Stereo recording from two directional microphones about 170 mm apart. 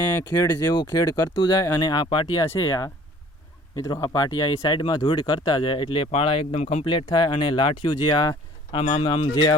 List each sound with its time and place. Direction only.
0.3 s speech: 25° left (ahead or behind)